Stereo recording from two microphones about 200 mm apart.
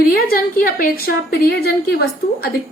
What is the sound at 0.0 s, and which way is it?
A woman's voice, 45° left (ahead or behind).